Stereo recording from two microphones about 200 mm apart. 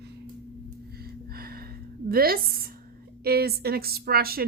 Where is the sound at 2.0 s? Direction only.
50° right (ahead or behind).